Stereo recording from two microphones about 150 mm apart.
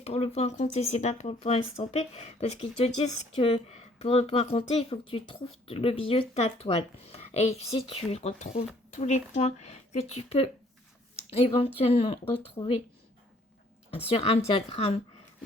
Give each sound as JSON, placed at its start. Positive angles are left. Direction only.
{"t": 0.0, "sound": "a woman's voice", "side_deg": 45}
{"t": 13.9, "sound": "a woman's voice", "side_deg": 40}